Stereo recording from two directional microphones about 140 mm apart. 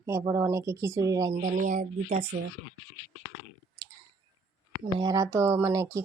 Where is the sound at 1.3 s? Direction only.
70° right (ahead or behind).